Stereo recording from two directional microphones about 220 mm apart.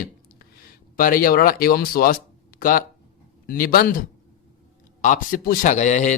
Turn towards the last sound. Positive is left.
turn(degrees=35)  # may be behind; listen again after turning